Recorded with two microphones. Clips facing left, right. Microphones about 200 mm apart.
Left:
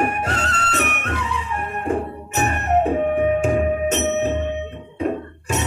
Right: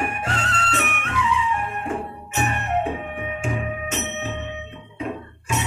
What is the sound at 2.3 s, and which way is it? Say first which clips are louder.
Music: left 4 dB; 45° left (ahead or behind).